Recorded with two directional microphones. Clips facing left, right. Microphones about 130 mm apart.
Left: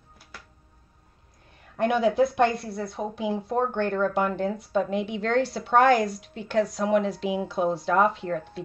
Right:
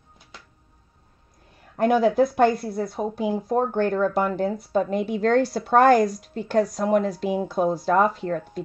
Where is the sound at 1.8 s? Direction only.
40° right (ahead or behind).